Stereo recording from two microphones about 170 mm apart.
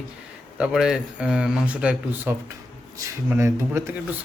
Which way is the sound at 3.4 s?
15° right (ahead or behind).